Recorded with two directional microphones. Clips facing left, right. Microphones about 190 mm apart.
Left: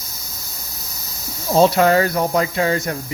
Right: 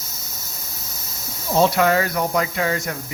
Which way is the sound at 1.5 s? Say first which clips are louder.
Left 3 dB; 35° left (ahead or behind).